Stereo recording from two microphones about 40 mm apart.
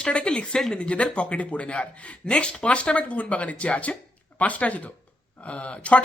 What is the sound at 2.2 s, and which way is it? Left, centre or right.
Speech, centre.